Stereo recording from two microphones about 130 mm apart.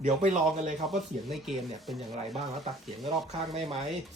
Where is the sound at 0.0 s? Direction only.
70° right (ahead or behind).